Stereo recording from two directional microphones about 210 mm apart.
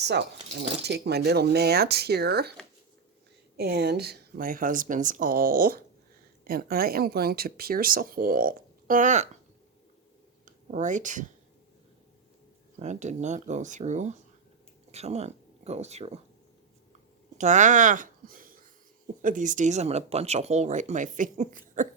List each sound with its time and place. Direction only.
0.0 s speech: 55° right (ahead or behind)
3.6 s speech: 50° right (ahead or behind)
10.4 s speech: 35° right (ahead or behind)
12.8 s speech: 35° right (ahead or behind)
17.3 s speech: 35° right (ahead or behind)